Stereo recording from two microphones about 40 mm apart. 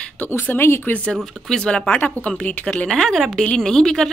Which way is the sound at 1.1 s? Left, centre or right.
Centre.